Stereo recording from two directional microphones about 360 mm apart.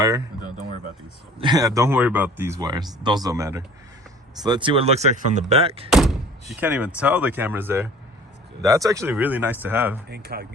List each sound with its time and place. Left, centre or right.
1.4 s speech: centre
5.9 s door: centre
6.5 s speech: centre
10.1 s speech: right